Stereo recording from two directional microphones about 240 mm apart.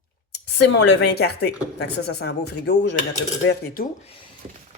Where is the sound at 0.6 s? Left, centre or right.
Left.